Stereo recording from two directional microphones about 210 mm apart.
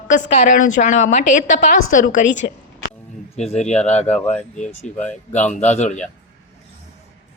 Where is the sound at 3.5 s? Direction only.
35° left (ahead or behind).